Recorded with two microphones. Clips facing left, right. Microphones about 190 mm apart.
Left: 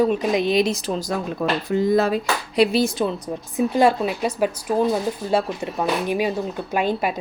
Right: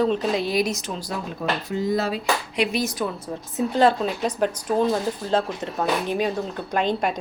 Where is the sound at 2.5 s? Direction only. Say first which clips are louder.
Left 11 dB; 35° left (ahead or behind).